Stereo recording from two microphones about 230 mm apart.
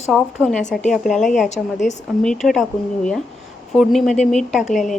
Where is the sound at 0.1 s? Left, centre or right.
Centre.